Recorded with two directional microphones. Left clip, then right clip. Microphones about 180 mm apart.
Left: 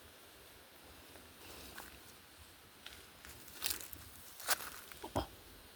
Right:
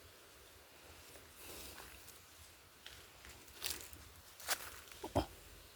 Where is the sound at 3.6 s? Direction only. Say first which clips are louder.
Left 3 dB; 55° left (ahead or behind).